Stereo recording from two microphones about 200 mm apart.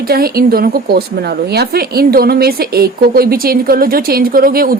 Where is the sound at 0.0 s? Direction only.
50° right (ahead or behind).